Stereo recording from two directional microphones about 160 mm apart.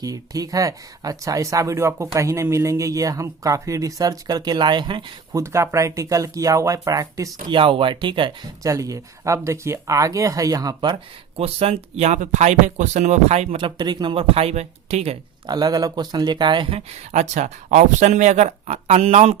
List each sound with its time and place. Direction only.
0.0 s speech: 20° right (ahead or behind)
5.4 s speech: 15° right (ahead or behind)
7.5 s speech: 35° right (ahead or behind)
11.3 s speech: 40° right (ahead or behind)
15.4 s speech: 25° right (ahead or behind); by 19.4 s 40° right (ahead or behind)